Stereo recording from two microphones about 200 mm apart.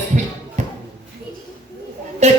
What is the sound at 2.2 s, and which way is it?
Music, 35° right (ahead or behind).